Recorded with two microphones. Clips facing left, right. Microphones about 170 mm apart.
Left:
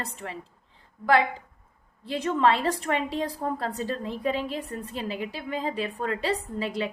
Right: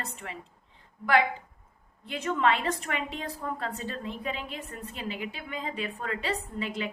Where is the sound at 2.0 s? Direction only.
35° left (ahead or behind).